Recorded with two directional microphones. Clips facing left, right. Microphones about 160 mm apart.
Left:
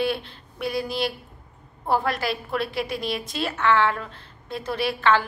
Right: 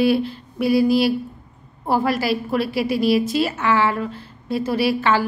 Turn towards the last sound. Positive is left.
turn(degrees=-5)  # may be behind; listen again after turning